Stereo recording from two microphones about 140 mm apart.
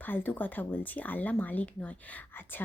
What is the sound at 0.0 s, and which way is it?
Speech, 15° left (ahead or behind).